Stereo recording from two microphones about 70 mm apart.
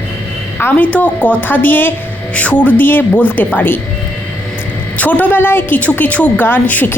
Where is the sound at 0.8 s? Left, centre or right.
Left.